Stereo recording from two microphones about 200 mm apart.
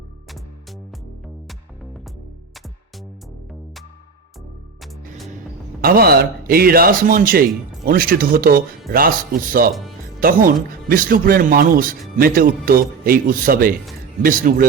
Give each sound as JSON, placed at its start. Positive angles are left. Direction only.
{"t": 4.8, "sound": "music", "side_deg": 0}
{"t": 5.8, "sound": "speech", "side_deg": -50}